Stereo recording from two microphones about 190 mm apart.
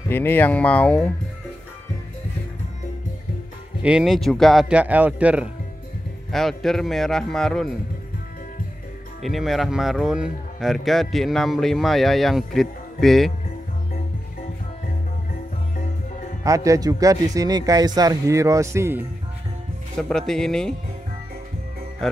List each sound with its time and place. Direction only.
0.1 s speech: 10° left (ahead or behind)
3.8 s speech: 5° right (ahead or behind)
9.2 s speech: centre (ahead or behind)
16.4 s speech: 15° right (ahead or behind)
20.0 s speech: 5° left (ahead or behind)